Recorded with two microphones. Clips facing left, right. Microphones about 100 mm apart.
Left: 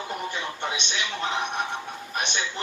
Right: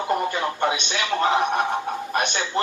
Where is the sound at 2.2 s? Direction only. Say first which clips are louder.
Right 4 dB; 45° right (ahead or behind).